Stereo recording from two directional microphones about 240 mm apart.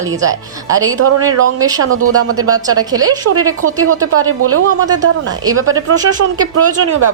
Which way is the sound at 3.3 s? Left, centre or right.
Right.